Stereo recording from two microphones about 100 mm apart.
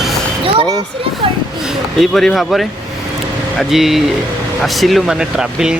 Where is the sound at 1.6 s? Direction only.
Centre (ahead or behind).